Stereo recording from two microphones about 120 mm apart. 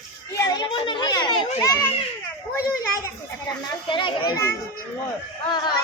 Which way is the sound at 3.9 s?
45° left (ahead or behind).